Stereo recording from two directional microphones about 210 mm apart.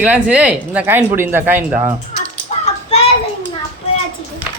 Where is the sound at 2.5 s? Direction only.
30° left (ahead or behind).